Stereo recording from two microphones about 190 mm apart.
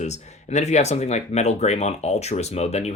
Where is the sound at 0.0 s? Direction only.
35° left (ahead or behind).